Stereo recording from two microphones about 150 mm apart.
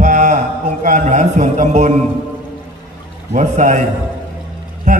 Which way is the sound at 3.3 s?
50° right (ahead or behind).